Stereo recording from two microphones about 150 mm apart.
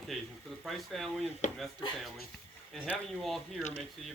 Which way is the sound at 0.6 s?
Centre (ahead or behind).